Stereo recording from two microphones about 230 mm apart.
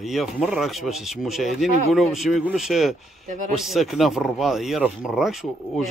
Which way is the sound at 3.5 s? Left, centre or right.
Centre.